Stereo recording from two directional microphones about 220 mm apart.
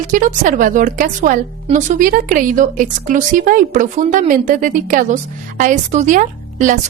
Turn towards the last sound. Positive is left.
turn(degrees=-35)  # may be behind; listen again after turning